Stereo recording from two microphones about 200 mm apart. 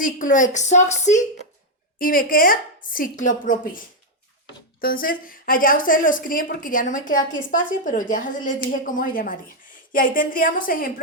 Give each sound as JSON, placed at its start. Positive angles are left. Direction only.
{"t": 0.0, "sound": "a woman's voice", "side_deg": 40}